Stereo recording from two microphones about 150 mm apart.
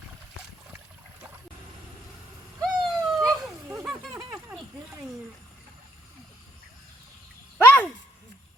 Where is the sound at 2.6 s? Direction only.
Centre (ahead or behind).